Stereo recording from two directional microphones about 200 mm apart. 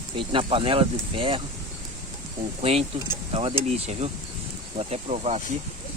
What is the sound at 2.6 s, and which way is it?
Speech, 30° right (ahead or behind).